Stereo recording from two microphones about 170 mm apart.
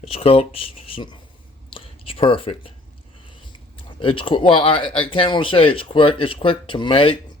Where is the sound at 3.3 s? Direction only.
30° left (ahead or behind).